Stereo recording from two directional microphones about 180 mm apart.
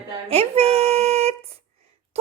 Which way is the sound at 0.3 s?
35° right (ahead or behind).